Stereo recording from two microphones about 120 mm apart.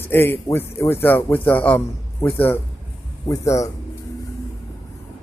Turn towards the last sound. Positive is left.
turn(degrees=25)  # may be behind; listen again after turning